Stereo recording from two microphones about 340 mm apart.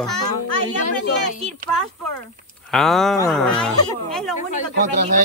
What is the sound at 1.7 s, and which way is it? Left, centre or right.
A man's voice, centre.